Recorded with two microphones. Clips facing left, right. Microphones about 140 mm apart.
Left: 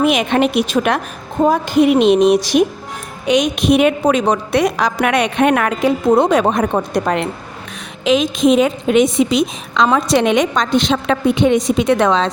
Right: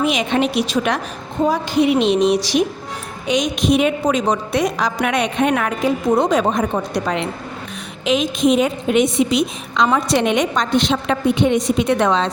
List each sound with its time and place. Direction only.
0.0 s a woman's voice: 55° left (ahead or behind)
3.2 s a woman's voice: 60° left (ahead or behind)
8.0 s a woman's voice: 90° left